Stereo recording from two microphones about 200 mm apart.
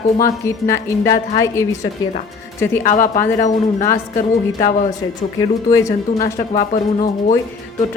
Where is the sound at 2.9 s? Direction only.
40° left (ahead or behind).